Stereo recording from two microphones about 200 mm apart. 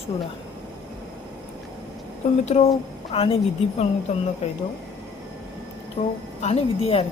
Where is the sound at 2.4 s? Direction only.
30° left (ahead or behind).